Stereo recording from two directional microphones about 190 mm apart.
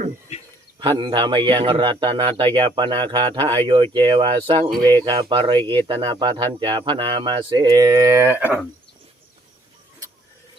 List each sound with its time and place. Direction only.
0.8 s speech: 25° right (ahead or behind); by 8.5 s 10° right (ahead or behind)